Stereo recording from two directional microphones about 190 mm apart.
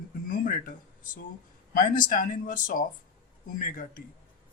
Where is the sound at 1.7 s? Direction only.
45° left (ahead or behind).